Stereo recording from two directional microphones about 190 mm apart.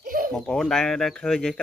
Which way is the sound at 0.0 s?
45° right (ahead or behind).